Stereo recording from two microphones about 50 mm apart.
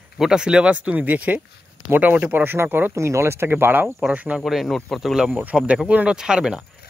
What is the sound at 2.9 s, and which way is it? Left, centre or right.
Speech, right.